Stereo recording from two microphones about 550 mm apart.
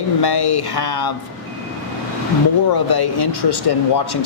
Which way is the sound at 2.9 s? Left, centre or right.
Left.